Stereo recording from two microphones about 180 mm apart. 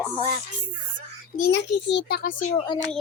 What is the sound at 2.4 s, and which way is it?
Speech, 35° left (ahead or behind).